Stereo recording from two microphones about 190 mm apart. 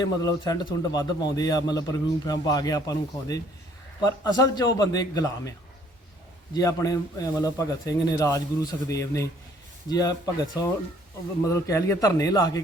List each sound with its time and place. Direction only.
0.0 s a man's voice: 20° left (ahead or behind)